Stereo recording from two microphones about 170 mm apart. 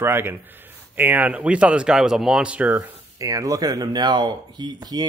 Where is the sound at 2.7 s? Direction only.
20° right (ahead or behind).